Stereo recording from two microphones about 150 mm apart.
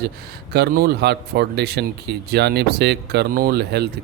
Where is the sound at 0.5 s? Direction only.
90° right.